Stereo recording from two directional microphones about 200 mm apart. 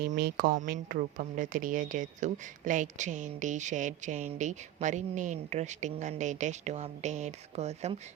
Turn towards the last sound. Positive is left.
turn(degrees=-35)  # may be behind; listen again after turning